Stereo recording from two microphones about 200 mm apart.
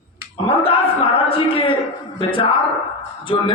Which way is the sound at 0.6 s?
30° left (ahead or behind).